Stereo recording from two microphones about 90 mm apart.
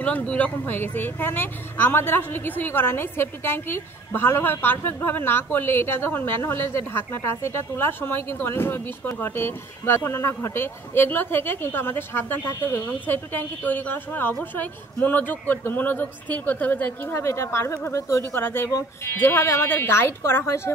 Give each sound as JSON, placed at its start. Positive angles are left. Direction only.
{"t": 0.0, "sound": "speech", "side_deg": 15}
{"t": 17.1, "sound": "speech", "side_deg": 30}
{"t": 18.7, "sound": "speech", "side_deg": 35}
{"t": 19.1, "sound": "speech", "side_deg": 25}